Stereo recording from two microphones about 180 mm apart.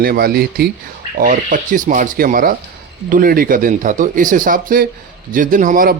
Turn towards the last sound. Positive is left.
turn(degrees=-50)  # may be behind; listen again after turning